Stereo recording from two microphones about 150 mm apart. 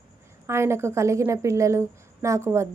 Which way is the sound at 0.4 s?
15° right (ahead or behind).